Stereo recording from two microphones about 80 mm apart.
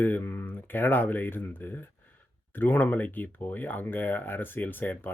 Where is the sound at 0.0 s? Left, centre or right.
Left.